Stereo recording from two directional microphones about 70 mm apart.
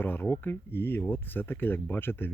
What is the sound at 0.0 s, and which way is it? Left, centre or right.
Speech, left.